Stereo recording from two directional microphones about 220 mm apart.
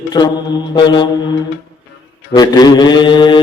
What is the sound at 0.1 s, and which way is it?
Mantra, 20° left (ahead or behind).